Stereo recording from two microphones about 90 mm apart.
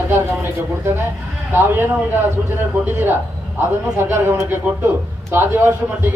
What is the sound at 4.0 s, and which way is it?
A man's voice, 30° right (ahead or behind).